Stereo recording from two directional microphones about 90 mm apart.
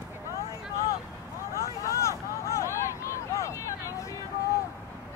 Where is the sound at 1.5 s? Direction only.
35° left (ahead or behind).